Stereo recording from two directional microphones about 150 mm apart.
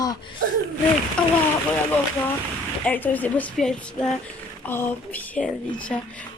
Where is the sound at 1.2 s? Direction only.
5° left (ahead or behind).